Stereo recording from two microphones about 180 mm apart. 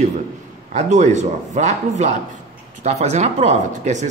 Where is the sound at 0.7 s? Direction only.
40° right (ahead or behind).